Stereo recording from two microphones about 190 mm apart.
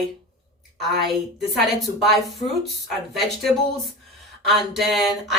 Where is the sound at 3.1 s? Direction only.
Centre (ahead or behind).